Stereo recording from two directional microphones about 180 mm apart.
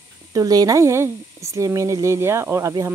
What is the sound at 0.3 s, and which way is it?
Speech, 20° right (ahead or behind).